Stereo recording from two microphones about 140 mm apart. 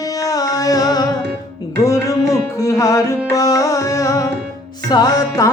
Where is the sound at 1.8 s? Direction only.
25° left (ahead or behind).